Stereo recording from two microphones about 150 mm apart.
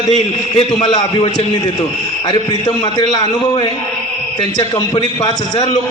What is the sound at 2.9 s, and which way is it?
A man's voice, 30° left (ahead or behind).